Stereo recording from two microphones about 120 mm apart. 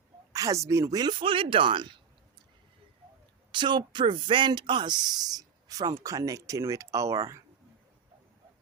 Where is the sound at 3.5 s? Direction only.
40° right (ahead or behind).